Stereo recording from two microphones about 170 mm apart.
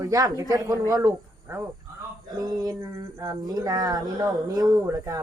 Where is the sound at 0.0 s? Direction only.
20° right (ahead or behind).